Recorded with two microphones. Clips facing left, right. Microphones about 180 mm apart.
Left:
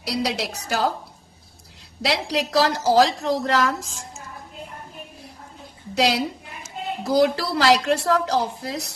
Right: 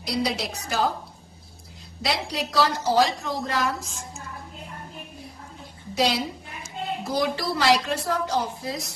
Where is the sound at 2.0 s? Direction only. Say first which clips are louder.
Left 4 dB; 70° left (ahead or behind).